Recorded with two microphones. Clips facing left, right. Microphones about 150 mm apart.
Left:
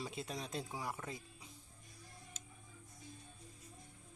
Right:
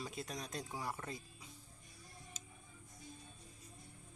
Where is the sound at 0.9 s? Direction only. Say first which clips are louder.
Even; 20° left (ahead or behind).